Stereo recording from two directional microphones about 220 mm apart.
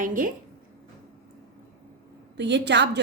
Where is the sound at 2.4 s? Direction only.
55° right (ahead or behind).